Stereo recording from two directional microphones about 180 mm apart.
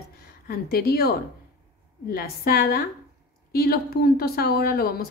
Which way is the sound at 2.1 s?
55° left (ahead or behind).